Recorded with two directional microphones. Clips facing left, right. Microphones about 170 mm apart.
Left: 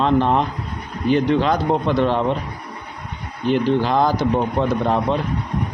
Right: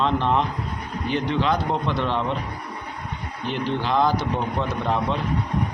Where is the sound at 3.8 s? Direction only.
40° left (ahead or behind).